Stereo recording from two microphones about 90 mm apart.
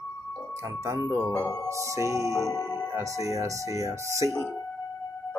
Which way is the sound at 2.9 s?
35° right (ahead or behind).